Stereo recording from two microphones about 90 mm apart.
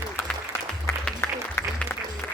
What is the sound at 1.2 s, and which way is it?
Applause, 25° left (ahead or behind).